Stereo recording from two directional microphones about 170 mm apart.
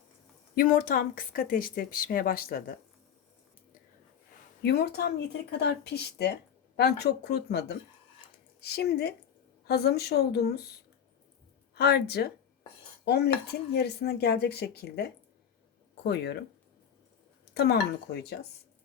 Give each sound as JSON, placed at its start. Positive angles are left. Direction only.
{"t": 0.5, "sound": "speech", "side_deg": 55}
{"t": 4.6, "sound": "speech", "side_deg": 70}
{"t": 11.7, "sound": "speech", "side_deg": 75}
{"t": 17.5, "sound": "speech", "side_deg": 75}